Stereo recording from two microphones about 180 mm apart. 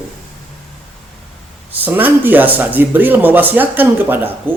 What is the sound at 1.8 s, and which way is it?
Speech, 10° right (ahead or behind).